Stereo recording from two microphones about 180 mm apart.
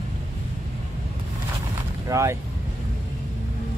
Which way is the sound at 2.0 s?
15° right (ahead or behind).